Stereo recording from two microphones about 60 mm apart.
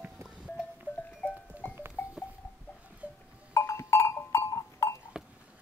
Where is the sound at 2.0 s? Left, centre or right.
Left.